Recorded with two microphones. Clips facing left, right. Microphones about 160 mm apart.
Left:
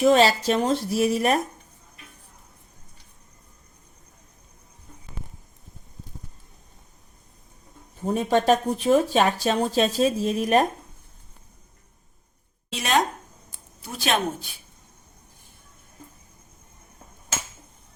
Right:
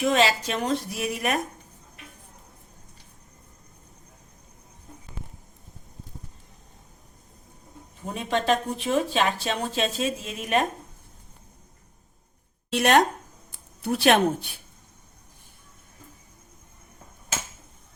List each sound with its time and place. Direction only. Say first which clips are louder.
0.0 s speech: left 5 dB; 35° left (ahead or behind)
8.0 s speech: left 5 dB; 40° left (ahead or behind)
12.7 s speech: right 4 dB; 65° right (ahead or behind)